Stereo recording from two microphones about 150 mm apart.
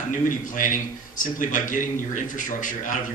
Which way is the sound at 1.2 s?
60° left (ahead or behind).